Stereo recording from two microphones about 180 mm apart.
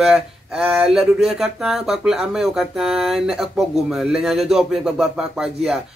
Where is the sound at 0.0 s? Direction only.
Centre (ahead or behind).